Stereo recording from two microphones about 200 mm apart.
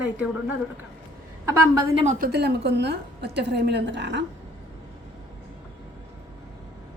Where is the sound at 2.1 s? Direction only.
50° right (ahead or behind).